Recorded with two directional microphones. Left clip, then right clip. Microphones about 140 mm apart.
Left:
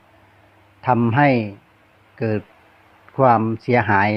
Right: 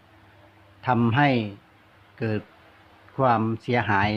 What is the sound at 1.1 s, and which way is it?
Speech, 30° left (ahead or behind).